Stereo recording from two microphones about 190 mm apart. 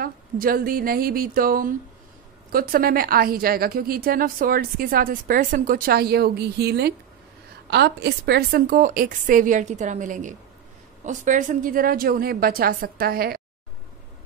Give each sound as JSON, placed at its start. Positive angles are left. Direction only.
{"t": 0.0, "sound": "a woman's voice", "side_deg": -50}